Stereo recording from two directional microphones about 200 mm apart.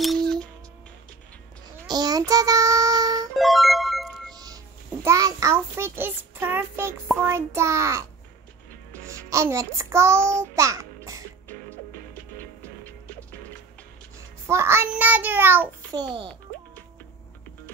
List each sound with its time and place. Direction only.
0.0 s music: centre (ahead or behind)
1.9 s child singing: 20° right (ahead or behind)
3.3 s music: centre (ahead or behind)
4.3 s music: 20° right (ahead or behind)
5.0 s child singing: 15° right (ahead or behind)
9.0 s a child's voice: 15° right (ahead or behind)
14.5 s child singing: 15° right (ahead or behind)
15.9 s a child's voice: 20° right (ahead or behind)